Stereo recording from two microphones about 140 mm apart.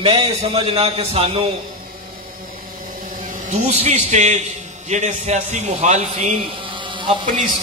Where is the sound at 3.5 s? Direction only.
50° right (ahead or behind).